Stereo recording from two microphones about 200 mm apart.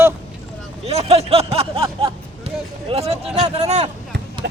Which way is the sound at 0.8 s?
30° right (ahead or behind).